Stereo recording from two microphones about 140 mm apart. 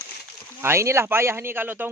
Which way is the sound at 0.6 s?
20° right (ahead or behind).